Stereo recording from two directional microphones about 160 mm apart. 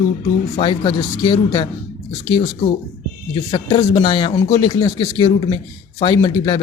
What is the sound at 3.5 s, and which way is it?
Speech, 25° left (ahead or behind).